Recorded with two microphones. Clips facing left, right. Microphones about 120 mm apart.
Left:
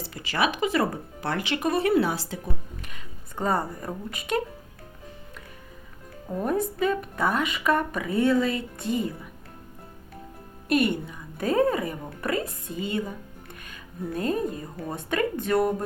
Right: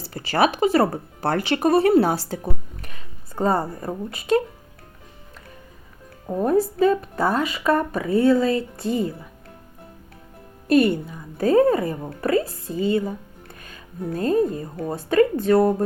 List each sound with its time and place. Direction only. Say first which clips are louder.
0.0 s speech: right 6 dB; 40° right (ahead or behind)
6.2 s speech: right 6 dB; 30° right (ahead or behind)
10.7 s speech: right 6 dB; 35° right (ahead or behind)